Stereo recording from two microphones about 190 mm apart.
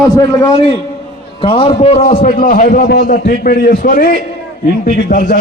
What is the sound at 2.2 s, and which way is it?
A man's voice, 45° left (ahead or behind).